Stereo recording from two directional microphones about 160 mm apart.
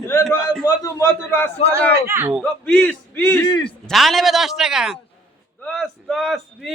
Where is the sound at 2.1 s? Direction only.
10° right (ahead or behind).